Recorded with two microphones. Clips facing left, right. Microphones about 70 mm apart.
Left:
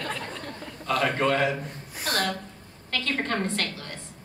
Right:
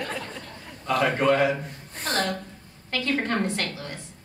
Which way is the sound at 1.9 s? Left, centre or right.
Centre.